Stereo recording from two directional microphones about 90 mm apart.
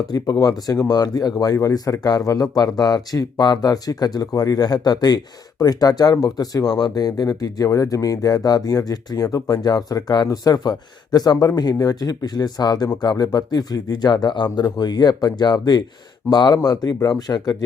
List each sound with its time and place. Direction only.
0.1 s speech: 45° left (ahead or behind)